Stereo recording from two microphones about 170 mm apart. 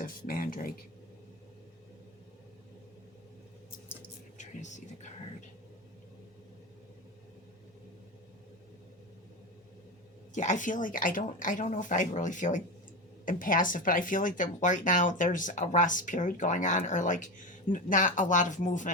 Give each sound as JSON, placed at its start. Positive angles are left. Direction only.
{"t": 0.0, "sound": "speech", "side_deg": 55}
{"t": 4.4, "sound": "speech", "side_deg": 45}
{"t": 10.3, "sound": "speech", "side_deg": 45}